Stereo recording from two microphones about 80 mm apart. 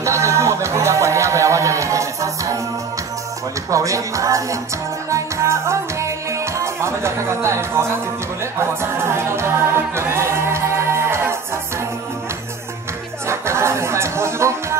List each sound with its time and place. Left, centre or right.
0.0 s music: right
3.7 s speech: right
5.1 s music: right
6.6 s speech: right
8.5 s music: right
13.3 s music: right